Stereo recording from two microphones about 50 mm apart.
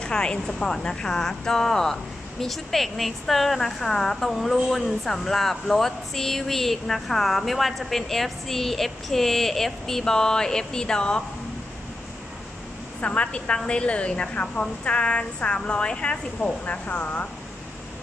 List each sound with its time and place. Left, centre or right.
0.0 s speech: centre
13.0 s a woman's voice: left